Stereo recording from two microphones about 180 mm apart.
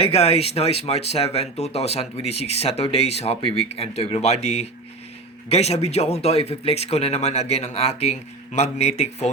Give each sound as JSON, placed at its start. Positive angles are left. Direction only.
{"t": 0.0, "sound": "speech", "side_deg": 35}